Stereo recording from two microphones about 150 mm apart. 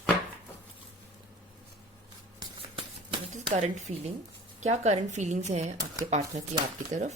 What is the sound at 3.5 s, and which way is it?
Speech, 50° right (ahead or behind).